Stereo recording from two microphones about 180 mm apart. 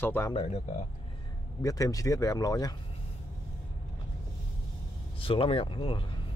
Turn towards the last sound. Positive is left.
turn(degrees=30)  # may be behind; listen again after turning